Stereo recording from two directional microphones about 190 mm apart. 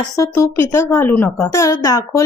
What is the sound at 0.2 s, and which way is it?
Speech, 15° left (ahead or behind).